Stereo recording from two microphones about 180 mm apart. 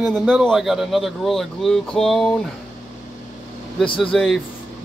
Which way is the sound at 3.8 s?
30° left (ahead or behind).